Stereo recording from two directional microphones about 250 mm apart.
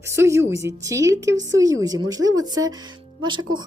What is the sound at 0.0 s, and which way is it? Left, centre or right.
Speech, centre.